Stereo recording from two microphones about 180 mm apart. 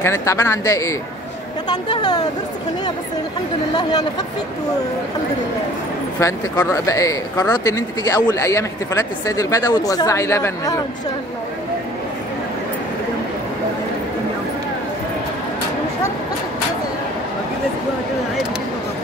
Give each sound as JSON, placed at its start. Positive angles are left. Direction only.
{"t": 0.0, "sound": "speech", "side_deg": 15}
{"t": 6.1, "sound": "speech", "side_deg": 15}